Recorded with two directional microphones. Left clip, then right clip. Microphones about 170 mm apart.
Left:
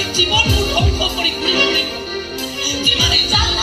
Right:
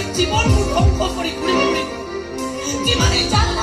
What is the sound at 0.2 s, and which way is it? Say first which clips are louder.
Speech: left 4 dB; 35° right (ahead or behind).